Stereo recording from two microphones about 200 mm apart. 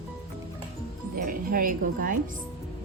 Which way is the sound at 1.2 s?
45° right (ahead or behind).